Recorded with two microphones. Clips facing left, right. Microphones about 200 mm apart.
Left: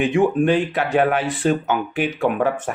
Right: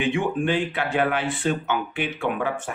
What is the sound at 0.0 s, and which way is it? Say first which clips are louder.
Speech: left 6 dB; 40° left (ahead or behind).